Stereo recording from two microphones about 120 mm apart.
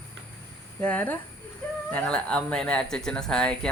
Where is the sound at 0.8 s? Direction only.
10° left (ahead or behind).